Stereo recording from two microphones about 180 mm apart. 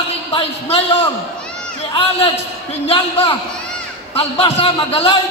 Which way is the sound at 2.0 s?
30° left (ahead or behind).